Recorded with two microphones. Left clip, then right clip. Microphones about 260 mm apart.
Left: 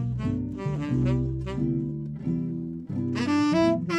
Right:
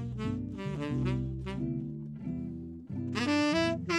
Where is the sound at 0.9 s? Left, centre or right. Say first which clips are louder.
Left 8 dB; right.